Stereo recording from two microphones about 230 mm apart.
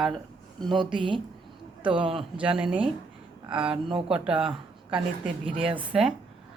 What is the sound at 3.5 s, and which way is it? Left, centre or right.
Speech, centre.